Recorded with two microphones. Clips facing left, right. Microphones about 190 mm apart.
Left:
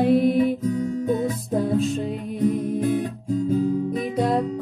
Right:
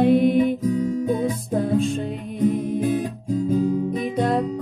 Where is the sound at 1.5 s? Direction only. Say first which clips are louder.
Even; centre (ahead or behind).